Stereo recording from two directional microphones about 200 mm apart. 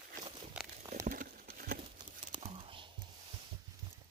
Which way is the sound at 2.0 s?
25° right (ahead or behind).